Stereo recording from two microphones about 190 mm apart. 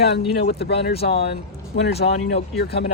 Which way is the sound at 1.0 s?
30° left (ahead or behind).